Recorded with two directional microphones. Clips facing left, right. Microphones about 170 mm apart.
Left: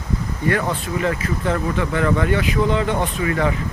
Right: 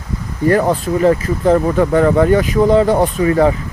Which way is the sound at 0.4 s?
40° right (ahead or behind).